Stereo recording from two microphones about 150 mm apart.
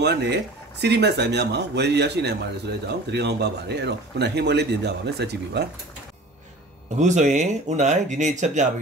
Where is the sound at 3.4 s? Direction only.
90° right.